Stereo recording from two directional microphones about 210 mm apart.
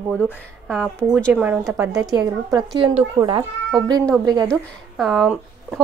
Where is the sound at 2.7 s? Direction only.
25° right (ahead or behind).